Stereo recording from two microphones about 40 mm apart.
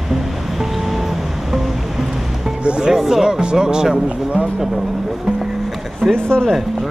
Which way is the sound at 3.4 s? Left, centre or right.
Right.